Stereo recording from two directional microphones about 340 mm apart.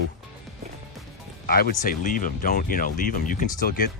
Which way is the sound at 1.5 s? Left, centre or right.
Left.